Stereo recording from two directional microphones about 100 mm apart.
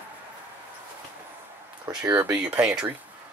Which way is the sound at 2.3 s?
10° right (ahead or behind).